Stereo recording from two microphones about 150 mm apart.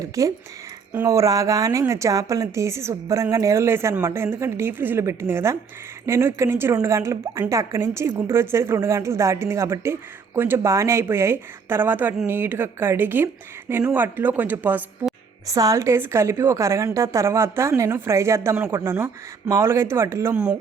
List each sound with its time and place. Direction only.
0.0 s a woman's voice: 20° right (ahead or behind)
15.4 s a woman's voice: 20° right (ahead or behind)
20.3 s a woman's voice: 5° right (ahead or behind)